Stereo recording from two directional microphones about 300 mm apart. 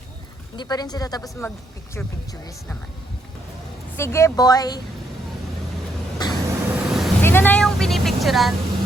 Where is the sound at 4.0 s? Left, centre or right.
Centre.